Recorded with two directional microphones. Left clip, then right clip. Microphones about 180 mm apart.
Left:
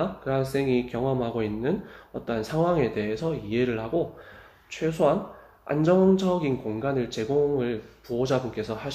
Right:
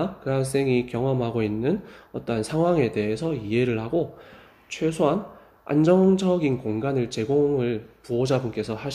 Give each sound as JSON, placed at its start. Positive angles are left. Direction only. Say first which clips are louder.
{"t": 0.0, "sound": "a man's voice", "louder": "right 1 dB", "side_deg": -45}